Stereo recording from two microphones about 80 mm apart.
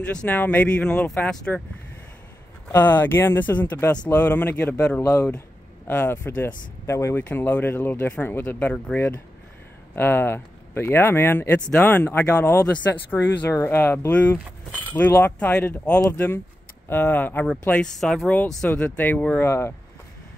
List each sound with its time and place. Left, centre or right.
0.1 s speech: centre
2.7 s speech: left
6.9 s speech: left
7.2 s speech: left
13.5 s speech: left
17.6 s speech: centre